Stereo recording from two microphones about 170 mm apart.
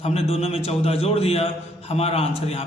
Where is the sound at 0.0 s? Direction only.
35° left (ahead or behind).